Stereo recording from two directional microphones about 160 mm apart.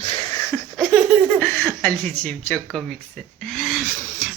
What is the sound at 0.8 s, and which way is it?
Laughter, centre (ahead or behind).